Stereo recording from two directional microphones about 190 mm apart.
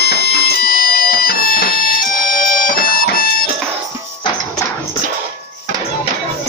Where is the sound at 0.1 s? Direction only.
55° left (ahead or behind).